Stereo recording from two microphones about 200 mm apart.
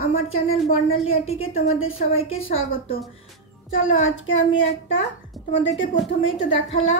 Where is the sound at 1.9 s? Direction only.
30° left (ahead or behind).